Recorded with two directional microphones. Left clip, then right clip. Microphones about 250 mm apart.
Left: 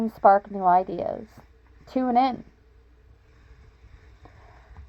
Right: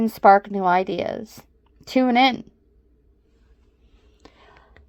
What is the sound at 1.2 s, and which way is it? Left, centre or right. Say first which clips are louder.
Speech: right 6 dB; right.